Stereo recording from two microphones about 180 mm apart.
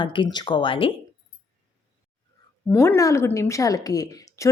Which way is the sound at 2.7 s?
15° left (ahead or behind).